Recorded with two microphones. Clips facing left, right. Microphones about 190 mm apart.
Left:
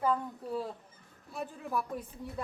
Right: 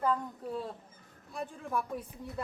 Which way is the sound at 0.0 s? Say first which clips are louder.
Even; 5° left (ahead or behind).